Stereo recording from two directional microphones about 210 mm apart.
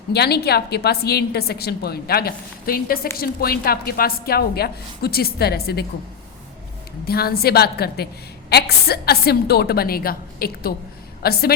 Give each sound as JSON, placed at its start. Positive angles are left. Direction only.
{"t": 0.1, "sound": "a woman's voice", "side_deg": 50}
{"t": 7.1, "sound": "a woman's voice", "side_deg": 45}